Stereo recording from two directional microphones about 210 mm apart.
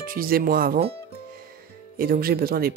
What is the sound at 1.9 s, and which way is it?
Speech, 45° right (ahead or behind).